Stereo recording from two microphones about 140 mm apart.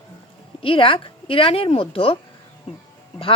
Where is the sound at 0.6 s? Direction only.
40° left (ahead or behind).